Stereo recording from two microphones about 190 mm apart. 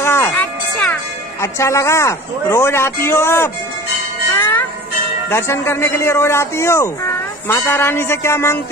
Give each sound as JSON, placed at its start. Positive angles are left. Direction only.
{"t": 0.0, "sound": "music", "side_deg": 15}
{"t": 1.4, "sound": "speech", "side_deg": 15}
{"t": 4.3, "sound": "music", "side_deg": 15}
{"t": 5.3, "sound": "speech", "side_deg": 15}